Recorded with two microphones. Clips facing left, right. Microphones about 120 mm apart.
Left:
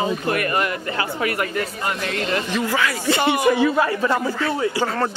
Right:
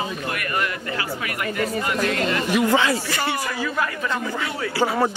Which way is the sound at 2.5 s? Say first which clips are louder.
Right 3 dB; 15° right (ahead or behind).